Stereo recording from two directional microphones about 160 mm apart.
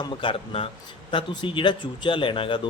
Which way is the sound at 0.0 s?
30° left (ahead or behind).